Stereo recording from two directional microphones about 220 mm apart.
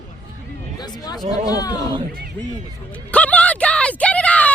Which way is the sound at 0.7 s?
20° left (ahead or behind).